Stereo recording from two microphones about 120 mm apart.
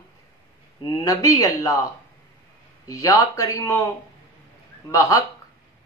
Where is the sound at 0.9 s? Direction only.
30° left (ahead or behind).